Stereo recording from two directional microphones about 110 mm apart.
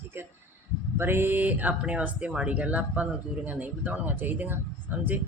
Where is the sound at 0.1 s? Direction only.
20° right (ahead or behind).